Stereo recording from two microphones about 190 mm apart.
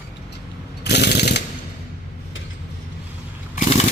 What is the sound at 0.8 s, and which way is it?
Jackhammer, 60° left (ahead or behind).